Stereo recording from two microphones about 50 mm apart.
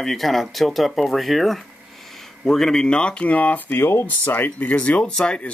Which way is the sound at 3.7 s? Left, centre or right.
Left.